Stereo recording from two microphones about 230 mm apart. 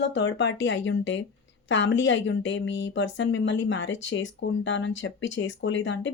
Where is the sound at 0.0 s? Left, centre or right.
Left.